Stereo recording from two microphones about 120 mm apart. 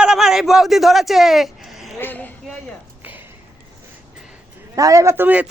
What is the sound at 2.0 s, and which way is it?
Speech, 15° left (ahead or behind).